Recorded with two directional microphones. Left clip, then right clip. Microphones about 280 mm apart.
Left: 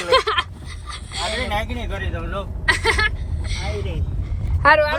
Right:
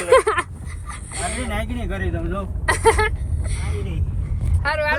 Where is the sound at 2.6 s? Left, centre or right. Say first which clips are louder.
Right 1 dB; centre.